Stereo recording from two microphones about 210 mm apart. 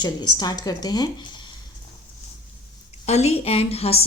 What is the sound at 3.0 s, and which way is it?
Speech, 30° left (ahead or behind).